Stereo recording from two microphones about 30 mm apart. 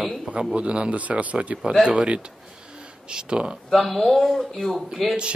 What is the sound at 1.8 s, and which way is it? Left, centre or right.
Speech, right.